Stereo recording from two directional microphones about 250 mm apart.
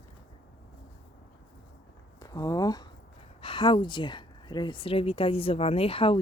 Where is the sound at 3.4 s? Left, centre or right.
Centre.